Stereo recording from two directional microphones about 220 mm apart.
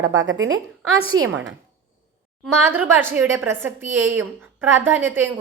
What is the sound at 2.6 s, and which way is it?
A woman's voice, 10° right (ahead or behind).